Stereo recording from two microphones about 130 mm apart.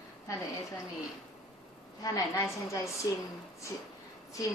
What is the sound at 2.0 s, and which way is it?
A woman's voice, 25° left (ahead or behind).